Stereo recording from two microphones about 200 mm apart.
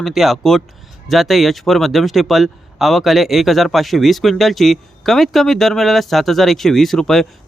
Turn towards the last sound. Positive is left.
turn(degrees=0)  # may be behind; listen again after turning